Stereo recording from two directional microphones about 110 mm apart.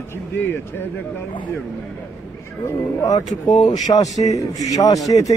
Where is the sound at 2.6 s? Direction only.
20° left (ahead or behind).